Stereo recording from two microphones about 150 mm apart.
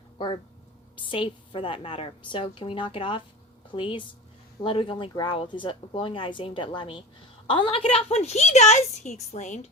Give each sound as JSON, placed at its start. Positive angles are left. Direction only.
{"t": 1.1, "sound": "a woman's voice", "side_deg": 35}